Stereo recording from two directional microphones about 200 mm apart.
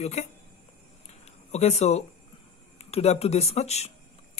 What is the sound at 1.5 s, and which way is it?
Speech, 35° left (ahead or behind).